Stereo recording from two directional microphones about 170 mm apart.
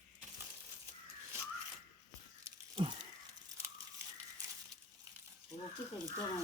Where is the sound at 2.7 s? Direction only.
30° right (ahead or behind).